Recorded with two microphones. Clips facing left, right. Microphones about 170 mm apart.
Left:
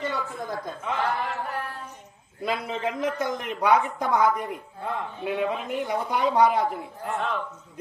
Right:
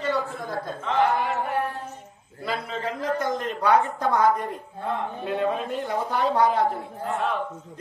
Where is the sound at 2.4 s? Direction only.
20° left (ahead or behind).